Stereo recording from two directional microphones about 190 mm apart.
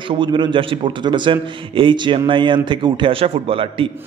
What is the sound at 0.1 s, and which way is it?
A man's voice, 25° right (ahead or behind).